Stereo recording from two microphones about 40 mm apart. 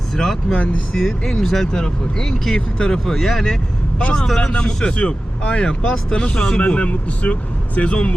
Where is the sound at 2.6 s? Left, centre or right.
Left.